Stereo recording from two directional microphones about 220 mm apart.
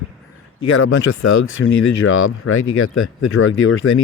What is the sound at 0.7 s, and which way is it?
Speech, 65° left (ahead or behind).